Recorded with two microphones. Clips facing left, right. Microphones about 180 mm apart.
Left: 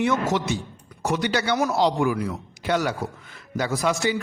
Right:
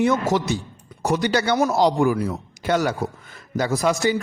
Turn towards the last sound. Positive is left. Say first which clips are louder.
# right 3 dB
turn(degrees=-40)  # may be behind; listen again after turning